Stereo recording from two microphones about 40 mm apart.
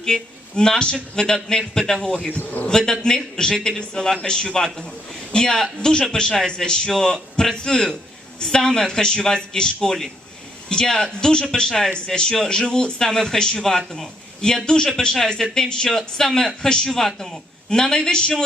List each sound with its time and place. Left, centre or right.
0.1 s a man's voice: left